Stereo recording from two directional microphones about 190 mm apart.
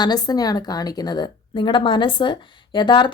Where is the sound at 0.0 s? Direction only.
20° left (ahead or behind).